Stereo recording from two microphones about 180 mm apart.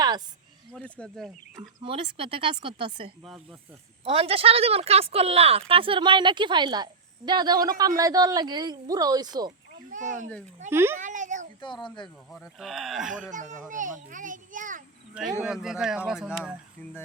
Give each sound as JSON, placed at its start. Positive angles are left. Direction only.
{"t": 0.7, "sound": "speech", "side_deg": 5}
{"t": 1.5, "sound": "a woman's voice", "side_deg": -30}
{"t": 9.9, "sound": "a child's voice", "side_deg": -45}
{"t": 10.7, "sound": "a child's voice", "side_deg": -15}
{"t": 10.9, "sound": "a child's voice", "side_deg": -45}
{"t": 11.6, "sound": "speech", "side_deg": 25}
{"t": 12.3, "sound": "speech", "side_deg": 0}
{"t": 13.3, "sound": "a child's voice", "side_deg": -45}
{"t": 15.4, "sound": "speech", "side_deg": -5}